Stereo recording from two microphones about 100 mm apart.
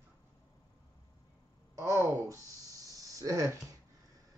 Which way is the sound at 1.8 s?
30° right (ahead or behind).